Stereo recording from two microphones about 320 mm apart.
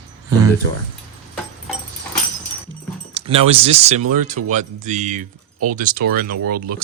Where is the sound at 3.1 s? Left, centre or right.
Centre.